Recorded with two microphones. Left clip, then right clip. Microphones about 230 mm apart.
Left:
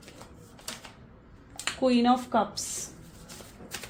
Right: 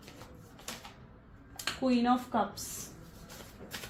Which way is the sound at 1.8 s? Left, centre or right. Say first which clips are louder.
Left 6 dB; left.